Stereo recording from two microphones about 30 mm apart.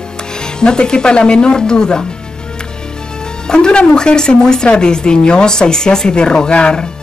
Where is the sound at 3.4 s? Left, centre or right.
Left.